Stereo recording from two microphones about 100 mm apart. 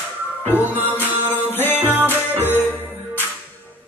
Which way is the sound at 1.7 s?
20° right (ahead or behind).